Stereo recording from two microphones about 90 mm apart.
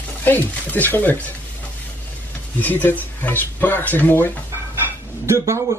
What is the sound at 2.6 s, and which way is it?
Speech, 20° left (ahead or behind).